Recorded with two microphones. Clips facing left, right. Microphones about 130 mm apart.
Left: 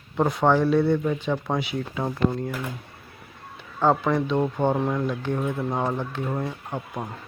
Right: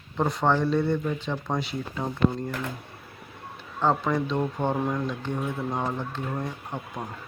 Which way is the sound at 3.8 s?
10° left (ahead or behind).